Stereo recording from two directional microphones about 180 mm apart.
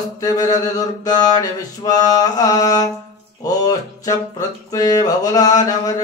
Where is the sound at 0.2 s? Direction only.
20° left (ahead or behind).